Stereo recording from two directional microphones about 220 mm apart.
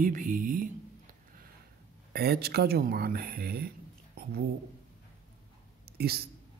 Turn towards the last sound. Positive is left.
turn(degrees=-45)  # may be behind; listen again after turning